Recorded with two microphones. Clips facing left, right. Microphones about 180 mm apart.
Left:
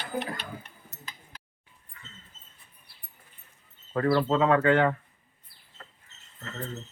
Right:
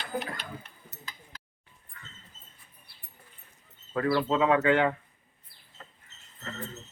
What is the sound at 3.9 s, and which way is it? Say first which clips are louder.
Speech: left 2 dB; 45° left (ahead or behind).